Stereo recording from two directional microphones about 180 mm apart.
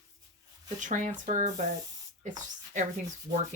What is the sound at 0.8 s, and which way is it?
Speech, 45° right (ahead or behind).